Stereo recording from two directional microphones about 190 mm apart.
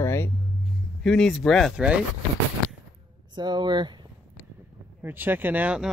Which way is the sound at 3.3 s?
25° right (ahead or behind).